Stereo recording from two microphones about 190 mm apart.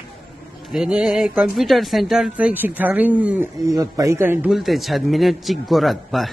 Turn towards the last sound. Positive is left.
turn(degrees=0)  # may be behind; listen again after turning